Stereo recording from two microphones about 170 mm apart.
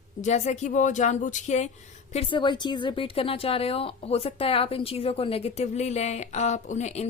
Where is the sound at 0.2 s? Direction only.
45° left (ahead or behind).